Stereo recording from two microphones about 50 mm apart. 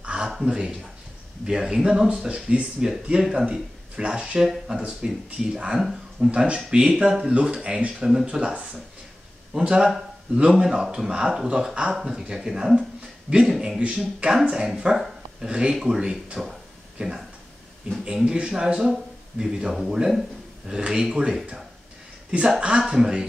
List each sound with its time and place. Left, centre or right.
0.0 s a sound: centre
0.4 s speech: centre
3.9 s speech: right
5.8 s speech: centre
6.3 s speech: right